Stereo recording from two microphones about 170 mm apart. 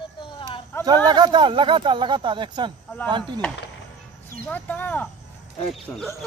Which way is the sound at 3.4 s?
10° left (ahead or behind).